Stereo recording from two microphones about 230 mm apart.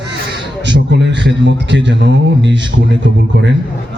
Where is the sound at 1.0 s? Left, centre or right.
Right.